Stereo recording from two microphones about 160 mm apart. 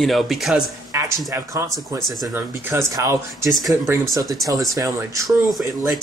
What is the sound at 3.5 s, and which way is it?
Speech, centre (ahead or behind).